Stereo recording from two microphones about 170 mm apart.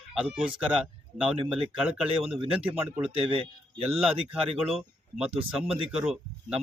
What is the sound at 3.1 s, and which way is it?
Speech, 30° right (ahead or behind).